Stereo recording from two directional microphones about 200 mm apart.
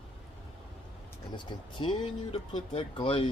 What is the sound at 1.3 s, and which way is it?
Speech, 25° left (ahead or behind).